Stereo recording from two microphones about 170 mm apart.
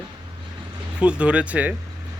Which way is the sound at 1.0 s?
5° right (ahead or behind).